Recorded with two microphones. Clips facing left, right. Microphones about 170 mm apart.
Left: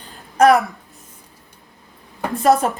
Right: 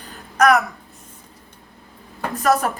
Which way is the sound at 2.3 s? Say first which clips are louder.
Left 3 dB; 25° left (ahead or behind).